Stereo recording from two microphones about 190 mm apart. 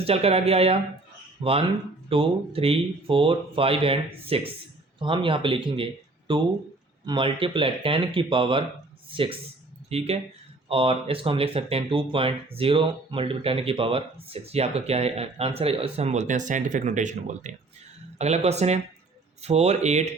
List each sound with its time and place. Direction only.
0.0 s speech: 30° right (ahead or behind)